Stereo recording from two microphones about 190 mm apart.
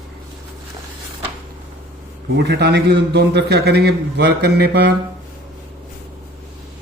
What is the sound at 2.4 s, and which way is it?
A man's voice, 60° right (ahead or behind).